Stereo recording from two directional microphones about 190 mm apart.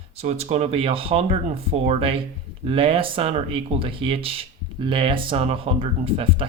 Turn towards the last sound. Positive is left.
turn(degrees=-30)  # may be behind; listen again after turning